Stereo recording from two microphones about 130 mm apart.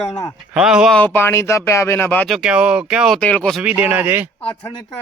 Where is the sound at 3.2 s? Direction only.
10° left (ahead or behind).